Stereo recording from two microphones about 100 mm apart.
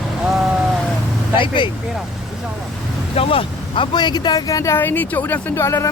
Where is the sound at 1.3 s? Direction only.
55° left (ahead or behind).